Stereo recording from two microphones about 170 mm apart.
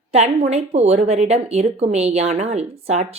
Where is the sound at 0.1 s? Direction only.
35° right (ahead or behind).